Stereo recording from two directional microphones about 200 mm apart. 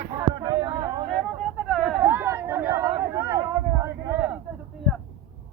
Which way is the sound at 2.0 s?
10° right (ahead or behind).